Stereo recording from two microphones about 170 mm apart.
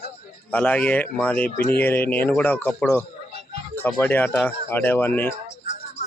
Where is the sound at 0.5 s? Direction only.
10° left (ahead or behind).